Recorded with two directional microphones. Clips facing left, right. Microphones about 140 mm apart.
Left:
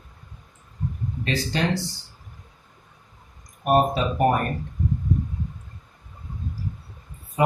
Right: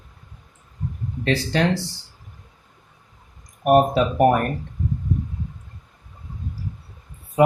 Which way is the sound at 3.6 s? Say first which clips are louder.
Right 4 dB; 70° right (ahead or behind).